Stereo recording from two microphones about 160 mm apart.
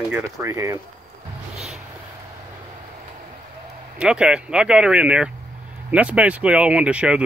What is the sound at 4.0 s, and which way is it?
Speech, 5° right (ahead or behind).